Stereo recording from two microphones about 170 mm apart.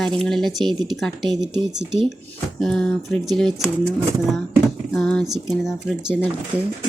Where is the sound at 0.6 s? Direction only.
25° right (ahead or behind).